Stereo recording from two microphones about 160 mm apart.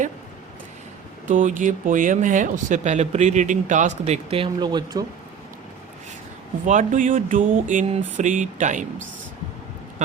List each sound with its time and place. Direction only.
1.3 s speech: 55° right (ahead or behind); by 5.0 s 25° right (ahead or behind)
6.7 s speech: 55° right (ahead or behind)